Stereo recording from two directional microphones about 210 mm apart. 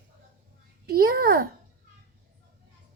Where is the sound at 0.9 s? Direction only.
45° right (ahead or behind).